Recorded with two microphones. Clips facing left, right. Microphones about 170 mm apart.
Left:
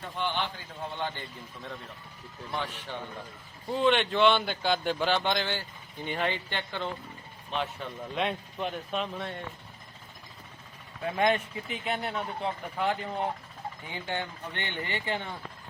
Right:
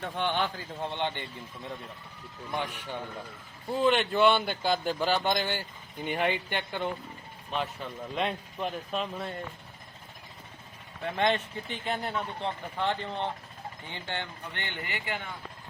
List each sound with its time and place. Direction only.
0.0 s a man's voice: 60° right (ahead or behind)
0.5 s a man's voice: 25° right (ahead or behind)
2.5 s speech: 15° right (ahead or behind)
7.5 s speech: centre (ahead or behind)
11.0 s speech: 5° left (ahead or behind); by 15.2 s 25° left (ahead or behind)